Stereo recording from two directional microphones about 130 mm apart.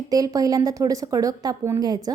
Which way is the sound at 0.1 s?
30° right (ahead or behind).